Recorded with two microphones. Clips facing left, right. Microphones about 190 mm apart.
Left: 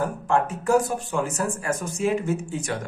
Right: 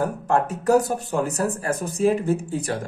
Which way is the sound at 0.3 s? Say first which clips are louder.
Right 2 dB; 40° right (ahead or behind).